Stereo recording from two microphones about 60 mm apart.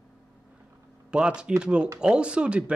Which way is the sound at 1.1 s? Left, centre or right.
Centre.